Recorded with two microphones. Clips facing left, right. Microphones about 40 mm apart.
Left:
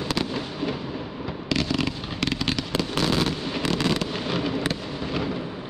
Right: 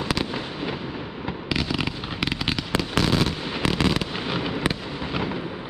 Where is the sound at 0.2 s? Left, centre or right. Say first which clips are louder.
Even; centre.